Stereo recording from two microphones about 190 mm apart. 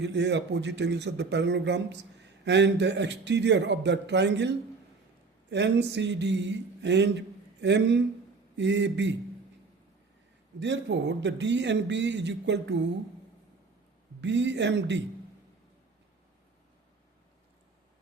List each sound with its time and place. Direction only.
0.0 s a man's voice: 65° right (ahead or behind)
10.6 s a man's voice: 65° right (ahead or behind)
14.2 s a man's voice: 70° right (ahead or behind)